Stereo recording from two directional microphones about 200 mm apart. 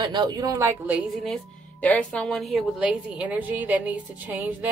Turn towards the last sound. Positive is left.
turn(degrees=-10)  # may be behind; listen again after turning